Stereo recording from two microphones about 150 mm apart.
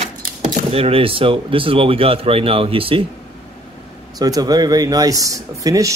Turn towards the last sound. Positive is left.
turn(degrees=-20)  # may be behind; listen again after turning